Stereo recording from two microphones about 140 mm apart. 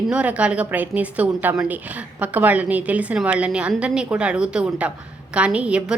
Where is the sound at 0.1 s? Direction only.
10° right (ahead or behind).